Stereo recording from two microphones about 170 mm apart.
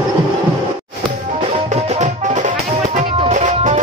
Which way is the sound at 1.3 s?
35° right (ahead or behind).